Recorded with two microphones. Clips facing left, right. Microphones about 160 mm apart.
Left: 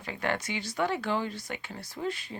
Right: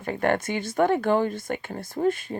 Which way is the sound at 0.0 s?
50° right (ahead or behind).